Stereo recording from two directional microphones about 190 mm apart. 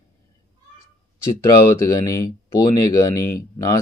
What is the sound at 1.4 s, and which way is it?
Speech, 15° left (ahead or behind).